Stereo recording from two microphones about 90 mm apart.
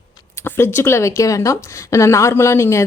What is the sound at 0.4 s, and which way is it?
A woman's voice, 25° left (ahead or behind).